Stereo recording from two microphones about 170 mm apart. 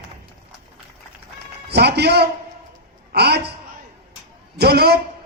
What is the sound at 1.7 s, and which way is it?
A man's voice, 75° right (ahead or behind).